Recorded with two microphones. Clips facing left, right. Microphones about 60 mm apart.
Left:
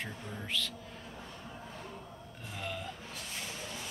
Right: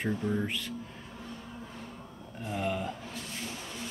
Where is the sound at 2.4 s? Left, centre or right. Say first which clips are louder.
Right 8 dB; centre.